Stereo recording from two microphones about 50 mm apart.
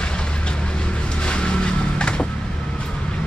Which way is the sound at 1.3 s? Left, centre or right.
Centre.